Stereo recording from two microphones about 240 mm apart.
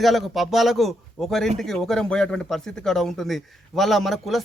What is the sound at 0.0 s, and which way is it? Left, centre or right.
A man's voice, centre.